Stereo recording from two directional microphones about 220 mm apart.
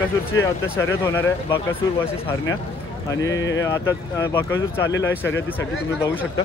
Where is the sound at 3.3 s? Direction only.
55° left (ahead or behind).